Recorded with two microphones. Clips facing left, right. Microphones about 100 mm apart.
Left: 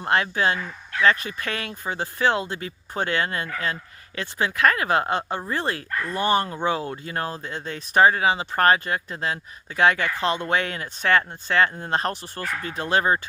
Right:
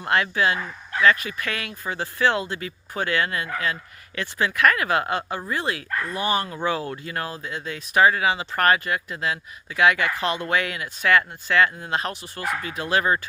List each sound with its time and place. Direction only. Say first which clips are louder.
0.0 s speech: even; 30° left (ahead or behind)